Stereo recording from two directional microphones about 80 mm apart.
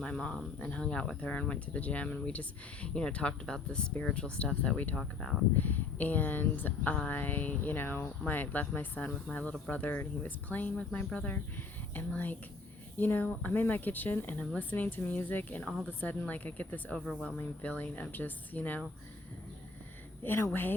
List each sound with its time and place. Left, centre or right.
0.0 s speech: centre
4.9 s speech: centre
5.5 s speech: left
20.2 s speech: left